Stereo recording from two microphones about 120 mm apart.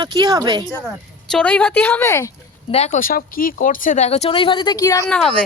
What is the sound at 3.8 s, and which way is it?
A woman's voice, 85° left.